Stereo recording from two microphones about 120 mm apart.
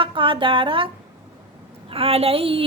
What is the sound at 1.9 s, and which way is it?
Speech, 55° right (ahead or behind).